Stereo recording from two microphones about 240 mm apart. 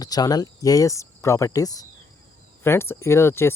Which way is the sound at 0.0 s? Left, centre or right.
Centre.